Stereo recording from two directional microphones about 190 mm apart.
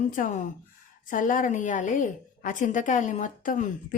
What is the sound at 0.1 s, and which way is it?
A woman's voice, 40° left (ahead or behind).